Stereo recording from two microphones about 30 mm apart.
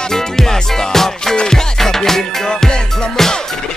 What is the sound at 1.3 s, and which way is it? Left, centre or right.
Music, left.